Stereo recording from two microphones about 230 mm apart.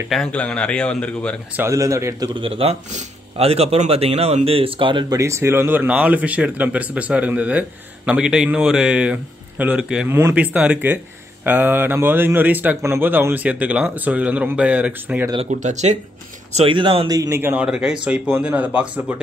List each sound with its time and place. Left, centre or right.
0.1 s speech: centre
1.6 s speech: centre
15.3 s speech: right; by 19.1 s centre